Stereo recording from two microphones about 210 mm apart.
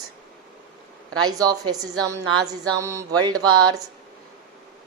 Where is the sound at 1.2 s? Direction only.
15° right (ahead or behind).